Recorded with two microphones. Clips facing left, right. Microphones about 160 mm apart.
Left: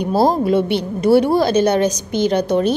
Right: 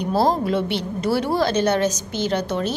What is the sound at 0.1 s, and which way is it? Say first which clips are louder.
A woman's voice: left 5 dB; 10° left (ahead or behind).